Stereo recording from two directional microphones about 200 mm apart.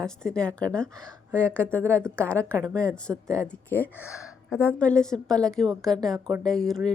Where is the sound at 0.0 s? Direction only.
5° left (ahead or behind).